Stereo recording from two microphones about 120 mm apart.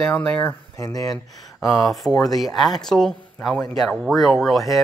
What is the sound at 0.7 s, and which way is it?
Speech, 30° left (ahead or behind).